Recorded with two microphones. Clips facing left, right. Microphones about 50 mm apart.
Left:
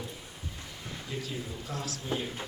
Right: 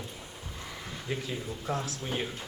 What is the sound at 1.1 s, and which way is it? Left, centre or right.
Speech, right.